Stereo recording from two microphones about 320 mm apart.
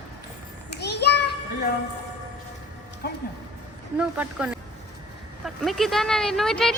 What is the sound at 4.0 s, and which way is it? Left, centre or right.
A woman's voice, centre.